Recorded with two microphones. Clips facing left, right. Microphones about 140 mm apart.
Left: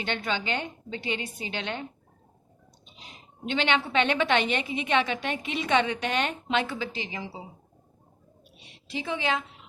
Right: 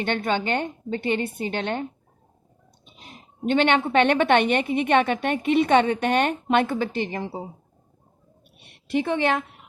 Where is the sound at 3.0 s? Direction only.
50° right (ahead or behind).